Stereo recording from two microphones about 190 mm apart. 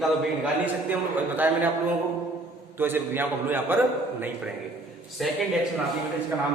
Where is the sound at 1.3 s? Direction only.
10° right (ahead or behind).